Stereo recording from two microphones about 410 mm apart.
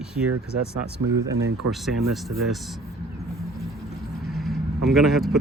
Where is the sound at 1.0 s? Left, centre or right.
Right.